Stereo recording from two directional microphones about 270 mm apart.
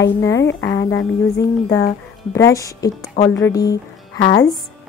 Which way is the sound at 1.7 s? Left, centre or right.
Centre.